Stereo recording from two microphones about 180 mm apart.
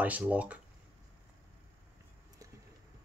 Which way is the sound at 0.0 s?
10° right (ahead or behind).